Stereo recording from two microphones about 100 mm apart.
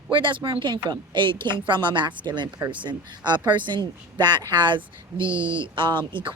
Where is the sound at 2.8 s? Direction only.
50° right (ahead or behind).